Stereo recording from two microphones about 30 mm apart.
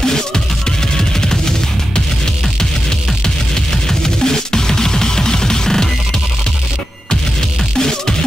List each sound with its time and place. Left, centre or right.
4.0 s music: left